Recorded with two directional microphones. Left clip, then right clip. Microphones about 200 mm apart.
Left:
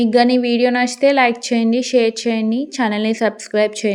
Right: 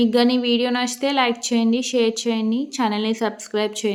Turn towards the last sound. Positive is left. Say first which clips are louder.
# left 6 dB
turn(degrees=25)  # may be behind; listen again after turning